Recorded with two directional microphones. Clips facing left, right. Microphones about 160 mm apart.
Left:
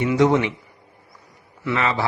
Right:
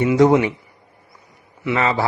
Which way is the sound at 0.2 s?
40° right (ahead or behind).